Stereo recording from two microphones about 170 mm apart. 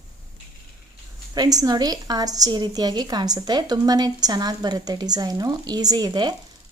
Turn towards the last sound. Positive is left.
turn(degrees=-25)  # may be behind; listen again after turning